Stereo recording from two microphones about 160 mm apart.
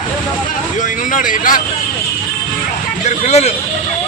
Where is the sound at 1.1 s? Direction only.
55° left (ahead or behind).